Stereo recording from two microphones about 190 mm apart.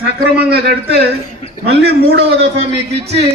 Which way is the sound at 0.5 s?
55° right (ahead or behind).